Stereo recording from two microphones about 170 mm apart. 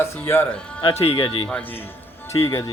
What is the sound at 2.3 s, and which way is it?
Speech, 20° left (ahead or behind).